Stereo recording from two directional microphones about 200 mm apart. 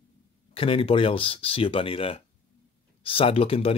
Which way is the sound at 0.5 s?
25° left (ahead or behind).